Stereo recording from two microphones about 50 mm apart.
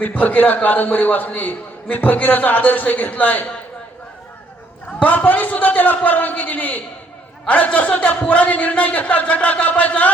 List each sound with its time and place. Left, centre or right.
0.0 s a man's voice: left
5.0 s a man's voice: left